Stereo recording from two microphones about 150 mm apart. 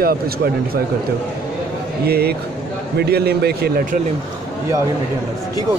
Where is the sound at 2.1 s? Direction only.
90° right.